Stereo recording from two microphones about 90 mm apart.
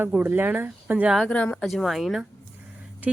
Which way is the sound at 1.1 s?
10° left (ahead or behind).